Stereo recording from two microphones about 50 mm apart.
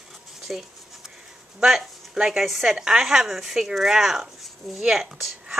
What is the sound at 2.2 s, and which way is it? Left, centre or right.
A woman's voice, centre.